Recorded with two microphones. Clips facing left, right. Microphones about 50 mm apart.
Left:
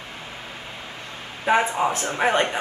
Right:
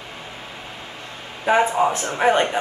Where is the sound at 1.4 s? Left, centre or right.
Centre.